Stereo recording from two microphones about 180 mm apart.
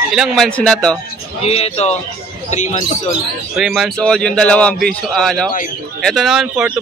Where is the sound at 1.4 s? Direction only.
35° left (ahead or behind).